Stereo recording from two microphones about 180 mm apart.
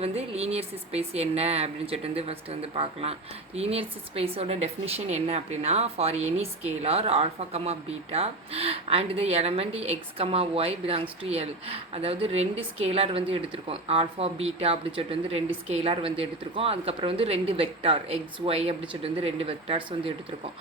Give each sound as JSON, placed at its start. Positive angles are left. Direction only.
{"t": 0.0, "sound": "speech", "side_deg": -35}